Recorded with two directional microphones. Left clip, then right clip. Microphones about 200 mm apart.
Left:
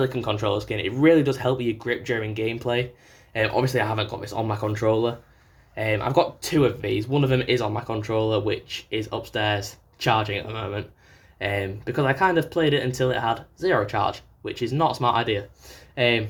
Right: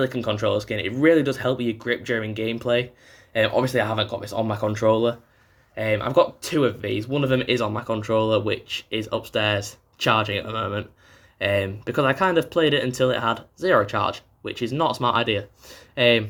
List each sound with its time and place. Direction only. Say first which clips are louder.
0.0 s speech: right 1 dB; 15° right (ahead or behind)